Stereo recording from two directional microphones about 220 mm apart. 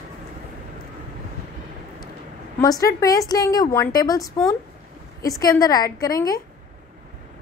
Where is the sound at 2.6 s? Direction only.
15° left (ahead or behind).